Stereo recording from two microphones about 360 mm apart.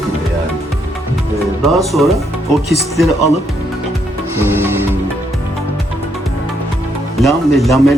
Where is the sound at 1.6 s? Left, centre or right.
Centre.